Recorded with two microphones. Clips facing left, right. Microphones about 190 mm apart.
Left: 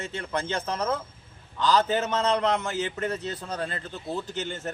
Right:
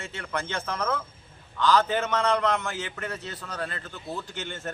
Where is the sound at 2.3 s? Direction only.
20° left (ahead or behind).